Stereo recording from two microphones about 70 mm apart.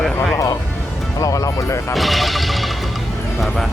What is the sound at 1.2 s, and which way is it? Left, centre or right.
Speech, left.